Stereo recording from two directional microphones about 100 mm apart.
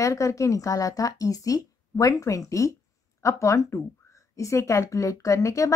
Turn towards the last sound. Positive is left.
turn(degrees=35)  # may be behind; listen again after turning